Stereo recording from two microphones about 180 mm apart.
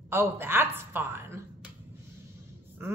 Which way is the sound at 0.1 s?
10° right (ahead or behind).